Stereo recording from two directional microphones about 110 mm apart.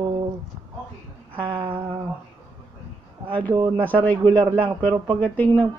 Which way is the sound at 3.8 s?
15° left (ahead or behind).